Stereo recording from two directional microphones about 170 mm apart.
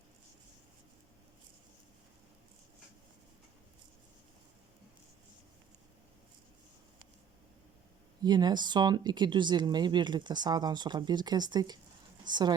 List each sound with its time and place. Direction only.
8.2 s speech: 25° right (ahead or behind)